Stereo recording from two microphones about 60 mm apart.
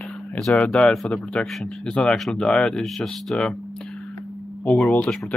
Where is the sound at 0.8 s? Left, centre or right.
Centre.